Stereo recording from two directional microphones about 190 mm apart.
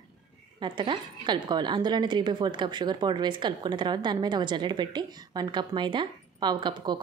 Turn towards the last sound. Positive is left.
turn(degrees=-25)  # may be behind; listen again after turning